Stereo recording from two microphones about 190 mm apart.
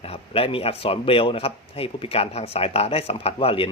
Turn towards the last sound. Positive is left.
turn(degrees=30)  # may be behind; listen again after turning